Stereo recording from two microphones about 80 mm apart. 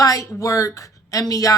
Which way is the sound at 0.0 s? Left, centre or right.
Left.